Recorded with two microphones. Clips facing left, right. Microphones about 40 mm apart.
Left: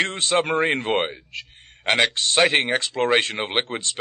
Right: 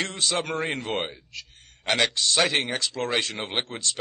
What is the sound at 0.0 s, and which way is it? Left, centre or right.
A man's voice, left.